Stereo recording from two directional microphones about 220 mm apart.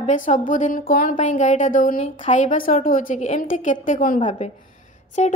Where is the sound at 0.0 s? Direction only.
35° left (ahead or behind).